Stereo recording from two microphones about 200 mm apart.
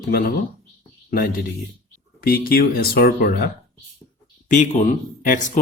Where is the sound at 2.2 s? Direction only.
50° left (ahead or behind).